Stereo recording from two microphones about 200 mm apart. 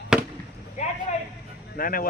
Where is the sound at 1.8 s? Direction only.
45° left (ahead or behind).